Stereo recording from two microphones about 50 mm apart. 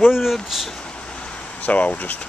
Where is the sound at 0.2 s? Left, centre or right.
Centre.